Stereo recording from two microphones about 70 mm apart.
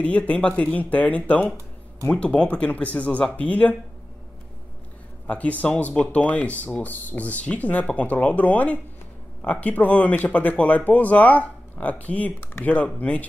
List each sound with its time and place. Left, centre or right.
0.0 s speech: left
5.2 s speech: left